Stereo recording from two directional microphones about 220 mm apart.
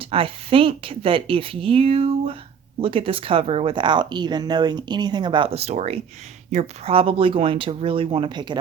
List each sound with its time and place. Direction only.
0.0 s speech: 25° right (ahead or behind)